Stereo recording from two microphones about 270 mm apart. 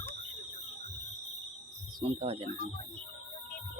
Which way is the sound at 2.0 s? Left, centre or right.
Right.